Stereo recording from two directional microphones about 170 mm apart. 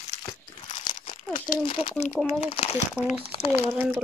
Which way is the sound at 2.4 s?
35° left (ahead or behind).